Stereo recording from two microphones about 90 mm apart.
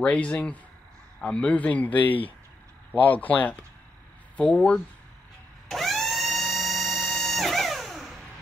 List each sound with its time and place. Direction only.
0.0 s a man's voice: 15° left (ahead or behind)
5.7 s music: 5° left (ahead or behind)